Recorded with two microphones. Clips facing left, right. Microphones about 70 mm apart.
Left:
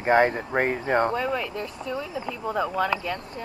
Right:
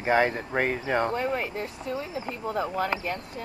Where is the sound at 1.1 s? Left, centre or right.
Left.